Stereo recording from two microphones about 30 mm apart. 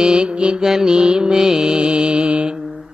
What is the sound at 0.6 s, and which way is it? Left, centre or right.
Music, centre.